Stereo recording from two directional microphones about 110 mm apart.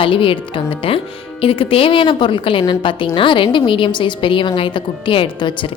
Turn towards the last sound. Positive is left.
turn(degrees=45)  # may be behind; listen again after turning